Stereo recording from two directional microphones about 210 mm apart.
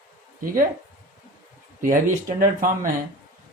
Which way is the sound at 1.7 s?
40° right (ahead or behind).